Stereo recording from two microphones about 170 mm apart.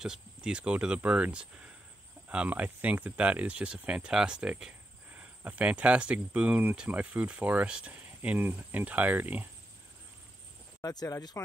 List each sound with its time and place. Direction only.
0.0 s speech: 5° right (ahead or behind)
10.8 s speech: 20° left (ahead or behind)